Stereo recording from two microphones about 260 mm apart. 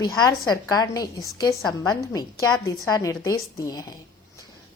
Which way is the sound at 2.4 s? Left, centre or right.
Centre.